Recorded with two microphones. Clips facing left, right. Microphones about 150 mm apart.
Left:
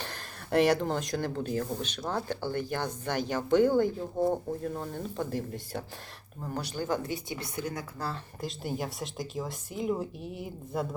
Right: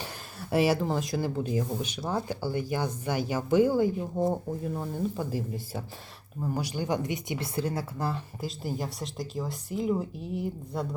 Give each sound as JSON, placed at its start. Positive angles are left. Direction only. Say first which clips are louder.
{"t": 0.5, "sound": "speech", "louder": "even", "side_deg": -5}
{"t": 8.4, "sound": "speech", "louder": "right 1 dB", "side_deg": 0}